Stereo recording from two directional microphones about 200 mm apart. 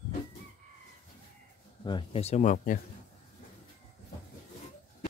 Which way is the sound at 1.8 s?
25° left (ahead or behind).